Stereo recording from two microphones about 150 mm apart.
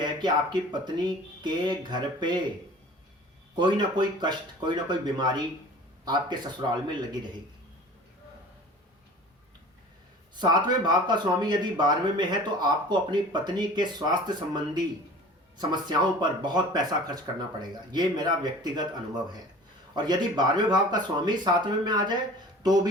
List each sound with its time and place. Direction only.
0.0 s speech: 30° right (ahead or behind)
3.5 s speech: 30° right (ahead or behind)
10.3 s speech: 30° right (ahead or behind)